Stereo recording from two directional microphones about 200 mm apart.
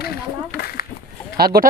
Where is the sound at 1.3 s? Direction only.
50° right (ahead or behind).